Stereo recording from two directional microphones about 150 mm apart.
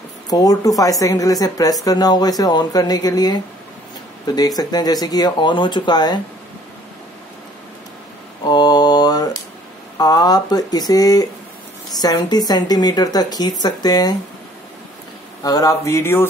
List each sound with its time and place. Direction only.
0.3 s speech: 25° left (ahead or behind)
8.5 s mantra: 25° left (ahead or behind)
9.9 s a sound: 25° left (ahead or behind)
11.9 s speech: 25° left (ahead or behind)
15.4 s speech: 25° left (ahead or behind)